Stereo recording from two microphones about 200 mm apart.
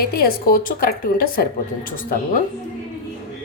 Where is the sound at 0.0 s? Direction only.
50° left (ahead or behind).